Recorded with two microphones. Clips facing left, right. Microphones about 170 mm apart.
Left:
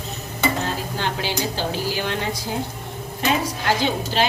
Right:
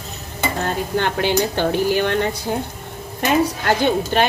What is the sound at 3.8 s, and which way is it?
Speech, 55° right (ahead or behind).